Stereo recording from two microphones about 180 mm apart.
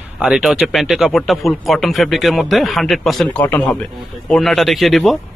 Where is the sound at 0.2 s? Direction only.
Centre (ahead or behind).